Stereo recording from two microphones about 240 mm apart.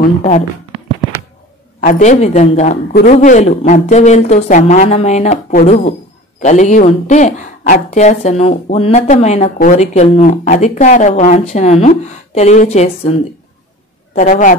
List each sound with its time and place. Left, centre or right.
1.8 s a woman's voice: left
14.1 s a man's voice: left